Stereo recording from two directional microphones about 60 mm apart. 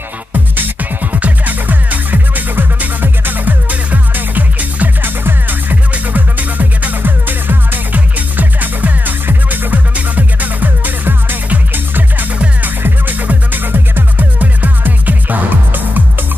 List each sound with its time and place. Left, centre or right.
1.1 s music: right